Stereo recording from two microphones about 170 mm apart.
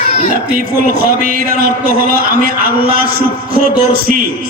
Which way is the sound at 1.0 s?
60° right (ahead or behind).